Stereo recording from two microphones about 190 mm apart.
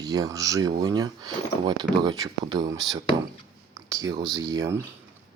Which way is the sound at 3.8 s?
20° right (ahead or behind).